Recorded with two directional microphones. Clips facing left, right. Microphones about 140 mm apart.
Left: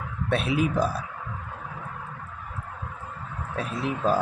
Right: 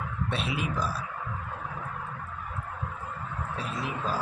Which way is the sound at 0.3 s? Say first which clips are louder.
Left 9 dB; 55° left (ahead or behind).